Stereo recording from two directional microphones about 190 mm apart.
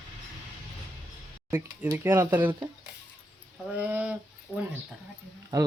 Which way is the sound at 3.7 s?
10° right (ahead or behind).